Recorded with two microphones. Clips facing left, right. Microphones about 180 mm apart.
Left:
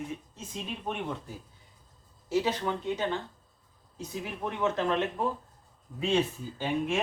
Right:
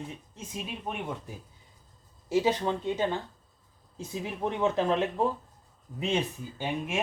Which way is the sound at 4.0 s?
25° right (ahead or behind).